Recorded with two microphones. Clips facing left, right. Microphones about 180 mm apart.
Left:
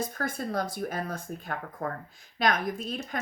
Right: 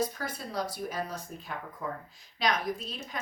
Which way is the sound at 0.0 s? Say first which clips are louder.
Left 1 dB; 50° left (ahead or behind).